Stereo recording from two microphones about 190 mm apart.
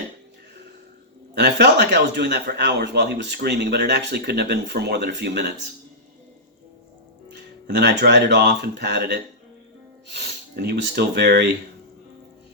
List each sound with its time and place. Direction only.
1.4 s speech: 60° right (ahead or behind)
7.3 s speech: 60° right (ahead or behind)